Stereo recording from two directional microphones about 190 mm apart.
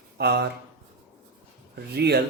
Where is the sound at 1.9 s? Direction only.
60° right (ahead or behind).